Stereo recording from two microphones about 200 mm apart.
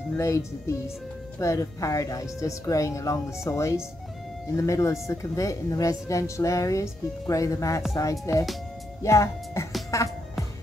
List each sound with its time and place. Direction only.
0.2 s a woman's voice: 15° left (ahead or behind)